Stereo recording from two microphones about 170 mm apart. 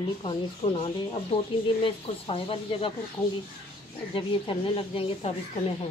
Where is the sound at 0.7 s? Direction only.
35° left (ahead or behind).